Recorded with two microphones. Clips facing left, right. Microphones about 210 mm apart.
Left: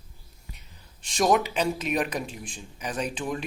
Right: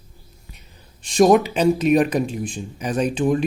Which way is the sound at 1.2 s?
35° right (ahead or behind).